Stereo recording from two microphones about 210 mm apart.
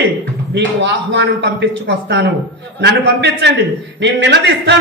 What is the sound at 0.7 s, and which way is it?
A man's voice, 55° right (ahead or behind).